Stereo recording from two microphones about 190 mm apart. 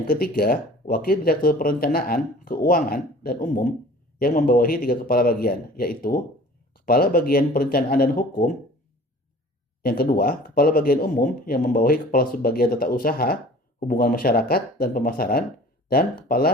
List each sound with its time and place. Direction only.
0.1 s speech: 50° left (ahead or behind)
9.8 s speech: 50° left (ahead or behind)